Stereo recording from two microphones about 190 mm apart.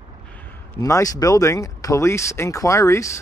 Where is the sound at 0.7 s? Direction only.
15° left (ahead or behind).